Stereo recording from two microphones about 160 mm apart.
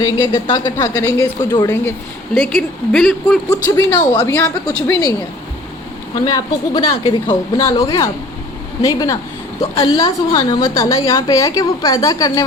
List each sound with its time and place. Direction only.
0.0 s a woman's voice: 25° left (ahead or behind)
2.3 s speech: centre (ahead or behind)
3.5 s a woman's voice: 20° left (ahead or behind)
6.2 s a woman's voice: 25° left (ahead or behind)